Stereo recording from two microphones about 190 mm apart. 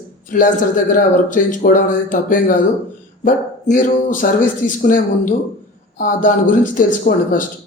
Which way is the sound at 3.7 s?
45° left (ahead or behind).